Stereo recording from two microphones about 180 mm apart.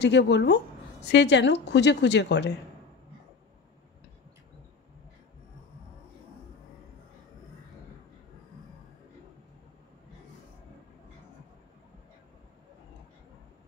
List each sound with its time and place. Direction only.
0.0 s a woman's voice: 75° left (ahead or behind)